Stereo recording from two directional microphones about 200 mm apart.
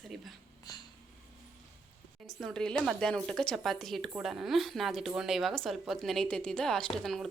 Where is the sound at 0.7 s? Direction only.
20° left (ahead or behind).